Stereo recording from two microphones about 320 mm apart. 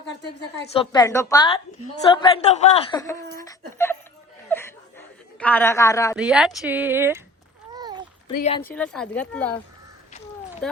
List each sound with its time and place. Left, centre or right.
0.0 s speech: left
0.7 s speech: centre
4.4 s chuckle: centre
6.1 s speech: centre
7.7 s a sound: centre
8.4 s speech: centre
8.6 s speech: centre
10.6 s clip-clop: centre